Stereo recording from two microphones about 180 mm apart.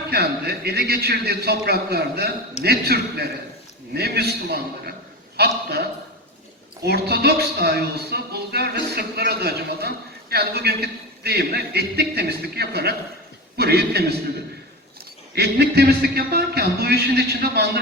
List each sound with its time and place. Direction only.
0.1 s a man's voice: 60° right (ahead or behind)
6.8 s a man's voice: 60° right (ahead or behind)
15.4 s a man's voice: 65° right (ahead or behind)